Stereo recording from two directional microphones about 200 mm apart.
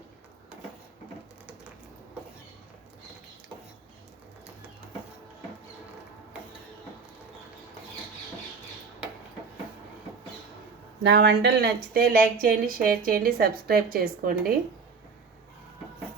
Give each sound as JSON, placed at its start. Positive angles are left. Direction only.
{"t": 11.0, "sound": "speech", "side_deg": -60}